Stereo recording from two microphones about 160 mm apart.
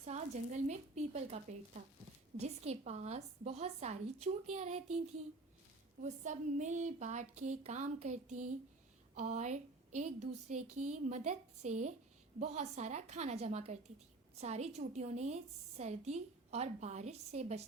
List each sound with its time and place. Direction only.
0.0 s a woman's voice: 45° right (ahead or behind)
6.0 s a woman's voice: 50° right (ahead or behind)